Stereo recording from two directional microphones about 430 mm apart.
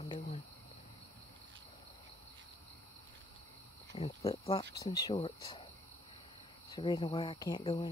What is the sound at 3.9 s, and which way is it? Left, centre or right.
Speech, centre.